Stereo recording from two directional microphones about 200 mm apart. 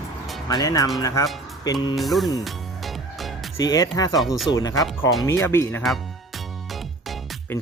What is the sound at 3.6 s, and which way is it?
Speech, 20° left (ahead or behind).